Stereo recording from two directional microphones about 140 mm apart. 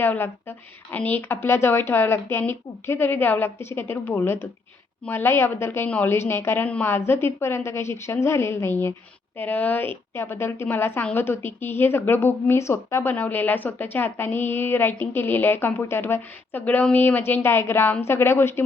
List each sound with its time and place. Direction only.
0.0 s a woman's voice: 15° left (ahead or behind)